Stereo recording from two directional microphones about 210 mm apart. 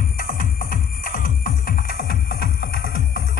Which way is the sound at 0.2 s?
45° left (ahead or behind).